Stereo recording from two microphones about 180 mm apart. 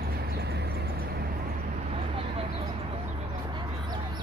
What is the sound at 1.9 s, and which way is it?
Vehicle, 35° right (ahead or behind).